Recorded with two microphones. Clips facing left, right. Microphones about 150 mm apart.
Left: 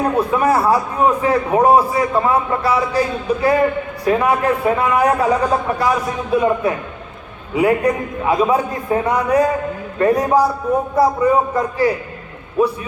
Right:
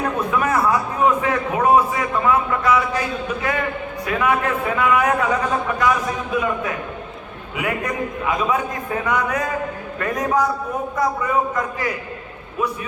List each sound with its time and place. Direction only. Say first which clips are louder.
0.0 s a man's voice: left 5 dB; 35° left (ahead or behind)